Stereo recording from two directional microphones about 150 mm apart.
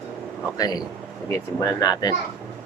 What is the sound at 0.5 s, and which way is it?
Speech, 25° left (ahead or behind).